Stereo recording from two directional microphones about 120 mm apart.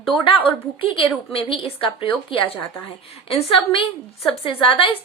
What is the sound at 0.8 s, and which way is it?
A woman's voice, 50° left (ahead or behind).